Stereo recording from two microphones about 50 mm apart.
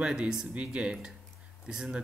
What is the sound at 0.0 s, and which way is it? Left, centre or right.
Speech, centre.